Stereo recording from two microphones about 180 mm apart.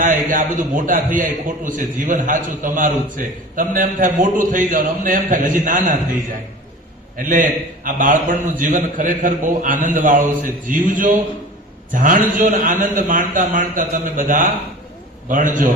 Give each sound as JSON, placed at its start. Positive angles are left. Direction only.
{"t": 0.0, "sound": "a man's voice", "side_deg": -45}
{"t": 7.2, "sound": "a man's voice", "side_deg": -45}